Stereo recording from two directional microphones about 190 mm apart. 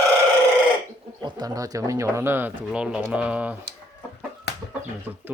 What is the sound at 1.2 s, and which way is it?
Speech, 20° right (ahead or behind).